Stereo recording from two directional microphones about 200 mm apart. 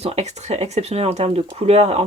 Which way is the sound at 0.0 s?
35° right (ahead or behind).